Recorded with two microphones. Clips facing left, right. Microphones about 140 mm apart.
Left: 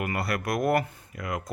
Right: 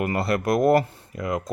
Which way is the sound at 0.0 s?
25° right (ahead or behind).